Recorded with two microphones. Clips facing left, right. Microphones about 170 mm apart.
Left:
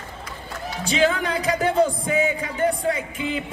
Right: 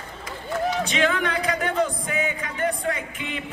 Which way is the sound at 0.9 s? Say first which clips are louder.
Left 2 dB; 35° left (ahead or behind).